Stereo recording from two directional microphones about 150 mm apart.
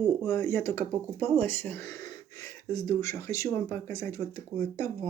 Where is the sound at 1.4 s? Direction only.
15° left (ahead or behind).